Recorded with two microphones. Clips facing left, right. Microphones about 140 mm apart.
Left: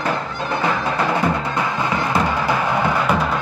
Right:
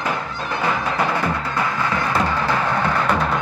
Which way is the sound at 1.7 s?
15° left (ahead or behind).